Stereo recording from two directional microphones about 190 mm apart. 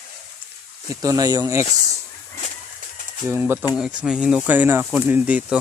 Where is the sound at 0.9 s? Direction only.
20° right (ahead or behind).